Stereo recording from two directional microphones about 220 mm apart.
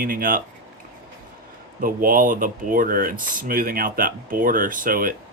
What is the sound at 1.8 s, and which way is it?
Speech, 40° right (ahead or behind).